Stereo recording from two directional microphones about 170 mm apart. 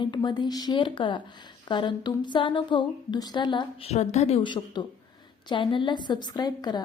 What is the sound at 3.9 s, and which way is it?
A woman's voice, 40° left (ahead or behind).